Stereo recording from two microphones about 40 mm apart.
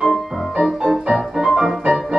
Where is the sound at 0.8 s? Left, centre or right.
Centre.